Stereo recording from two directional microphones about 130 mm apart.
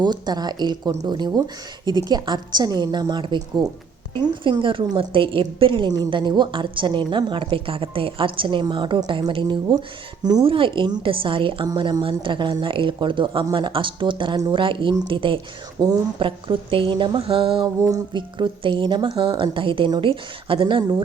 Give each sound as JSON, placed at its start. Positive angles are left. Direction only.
{"t": 0.0, "sound": "a woman's voice", "side_deg": -35}